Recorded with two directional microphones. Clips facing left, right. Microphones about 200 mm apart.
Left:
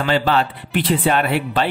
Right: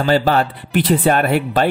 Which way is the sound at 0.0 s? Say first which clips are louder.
Right 3 dB; 40° right (ahead or behind).